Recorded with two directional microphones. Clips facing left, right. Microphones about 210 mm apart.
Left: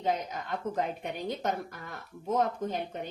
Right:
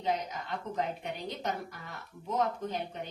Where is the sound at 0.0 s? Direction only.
50° left (ahead or behind).